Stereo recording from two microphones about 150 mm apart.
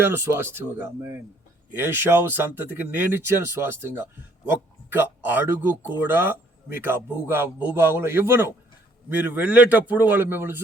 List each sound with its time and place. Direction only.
0.0 s a man's voice: 15° right (ahead or behind)